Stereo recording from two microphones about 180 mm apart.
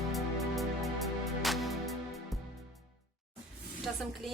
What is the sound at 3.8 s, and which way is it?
Speech, centre (ahead or behind).